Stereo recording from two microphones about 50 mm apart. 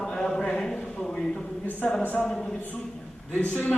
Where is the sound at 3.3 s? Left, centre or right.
Left.